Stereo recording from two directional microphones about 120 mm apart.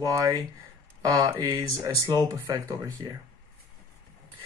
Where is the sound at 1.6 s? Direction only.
30° right (ahead or behind).